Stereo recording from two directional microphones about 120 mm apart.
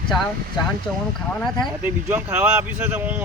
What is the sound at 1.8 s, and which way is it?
A man's voice, 15° right (ahead or behind).